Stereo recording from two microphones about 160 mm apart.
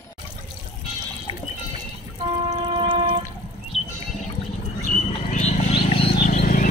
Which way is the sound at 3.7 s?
40° left (ahead or behind).